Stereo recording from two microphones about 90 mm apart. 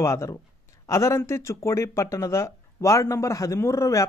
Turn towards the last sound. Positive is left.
turn(degrees=35)  # may be behind; listen again after turning